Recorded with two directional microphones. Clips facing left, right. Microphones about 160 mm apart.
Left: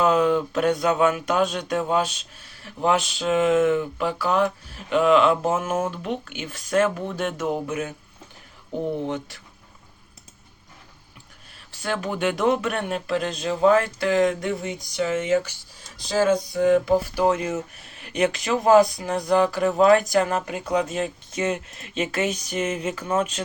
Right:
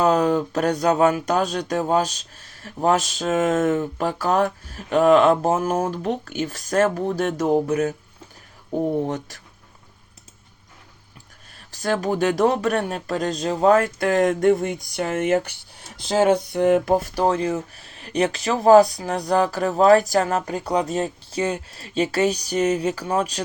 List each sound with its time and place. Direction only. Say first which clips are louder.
0.0 s speech: right 1 dB; 40° right (ahead or behind)
9.0 s speech: right 1 dB; 40° right (ahead or behind)
11.7 s speech: right 5 dB; 40° right (ahead or behind); by 17.0 s 60° right (ahead or behind)
17.2 s speech: right 1 dB; 35° right (ahead or behind)